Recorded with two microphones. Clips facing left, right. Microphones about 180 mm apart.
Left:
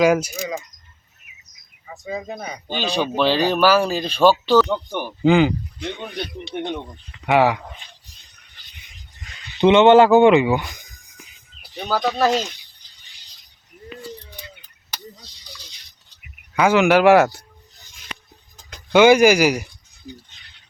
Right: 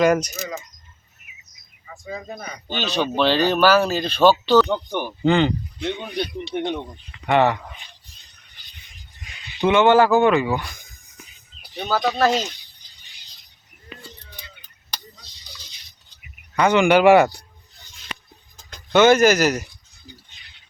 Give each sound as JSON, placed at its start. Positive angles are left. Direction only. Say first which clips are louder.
{"t": 0.0, "sound": "speech", "louder": "left 1 dB", "side_deg": 5}
{"t": 1.9, "sound": "speech", "louder": "left 4 dB", "side_deg": 20}
{"t": 7.3, "sound": "speech", "louder": "left 1 dB", "side_deg": 5}
{"t": 9.6, "sound": "speech", "louder": "left 4 dB", "side_deg": 20}
{"t": 11.8, "sound": "speech", "louder": "even", "side_deg": 0}
{"t": 16.6, "sound": "speech", "louder": "left 1 dB", "side_deg": 5}
{"t": 18.9, "sound": "speech", "louder": "left 2 dB", "side_deg": 10}